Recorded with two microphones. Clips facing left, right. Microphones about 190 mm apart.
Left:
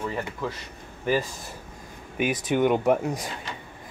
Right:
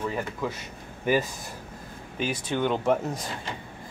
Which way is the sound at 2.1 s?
15° left (ahead or behind).